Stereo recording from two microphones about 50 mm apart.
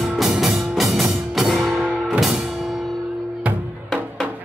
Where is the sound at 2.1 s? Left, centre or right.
Centre.